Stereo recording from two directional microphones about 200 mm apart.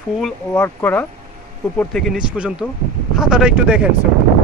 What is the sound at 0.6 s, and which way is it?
Speech, 10° left (ahead or behind).